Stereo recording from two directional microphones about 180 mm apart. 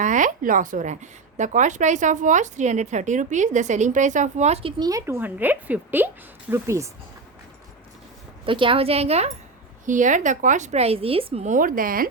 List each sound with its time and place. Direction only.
0.0 s a woman's voice: 45° right (ahead or behind)
4.8 s a woman's voice: 20° right (ahead or behind)
8.4 s a woman's voice: 30° right (ahead or behind); by 12.0 s 50° right (ahead or behind)